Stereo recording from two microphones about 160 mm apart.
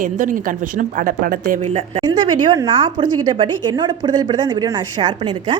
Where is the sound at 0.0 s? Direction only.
55° right (ahead or behind).